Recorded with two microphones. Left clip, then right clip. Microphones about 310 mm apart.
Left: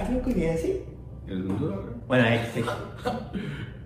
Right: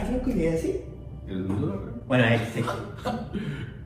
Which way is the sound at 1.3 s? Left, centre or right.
Centre.